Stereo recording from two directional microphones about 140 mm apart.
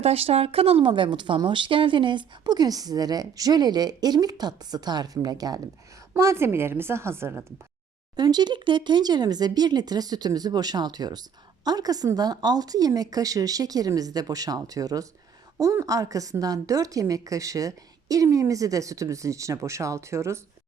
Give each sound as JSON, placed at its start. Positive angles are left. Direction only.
{"t": 0.0, "sound": "a woman's voice", "side_deg": -45}
{"t": 8.1, "sound": "speech", "side_deg": -30}